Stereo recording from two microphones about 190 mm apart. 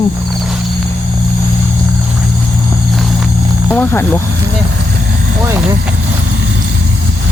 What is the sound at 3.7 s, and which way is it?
Speech, 10° left (ahead or behind).